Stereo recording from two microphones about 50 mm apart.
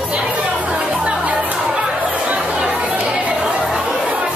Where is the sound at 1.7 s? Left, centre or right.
Centre.